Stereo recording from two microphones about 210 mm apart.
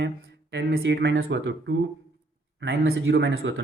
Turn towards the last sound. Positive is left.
turn(degrees=-70)  # may be behind; listen again after turning